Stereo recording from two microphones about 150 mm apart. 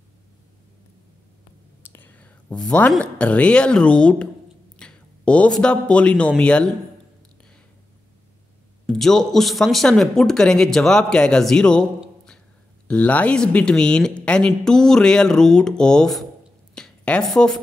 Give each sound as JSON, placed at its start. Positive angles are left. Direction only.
{"t": 1.8, "sound": "speech", "side_deg": 15}
{"t": 8.8, "sound": "speech", "side_deg": 5}
{"t": 16.7, "sound": "a sound", "side_deg": 5}